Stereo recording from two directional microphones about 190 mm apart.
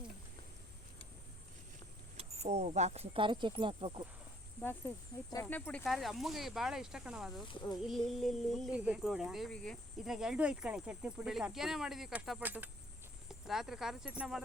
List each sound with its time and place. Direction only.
2.1 s speech: 35° right (ahead or behind)
4.6 s speech: 10° left (ahead or behind)